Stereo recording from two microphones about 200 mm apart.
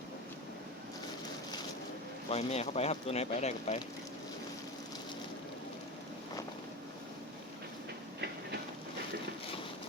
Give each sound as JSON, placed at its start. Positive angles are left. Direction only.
{"t": 2.3, "sound": "speech", "side_deg": 30}